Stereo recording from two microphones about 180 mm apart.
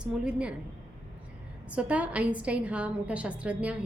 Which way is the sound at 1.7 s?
5° right (ahead or behind).